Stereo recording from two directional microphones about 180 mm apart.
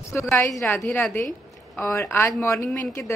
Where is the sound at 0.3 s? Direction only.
15° left (ahead or behind).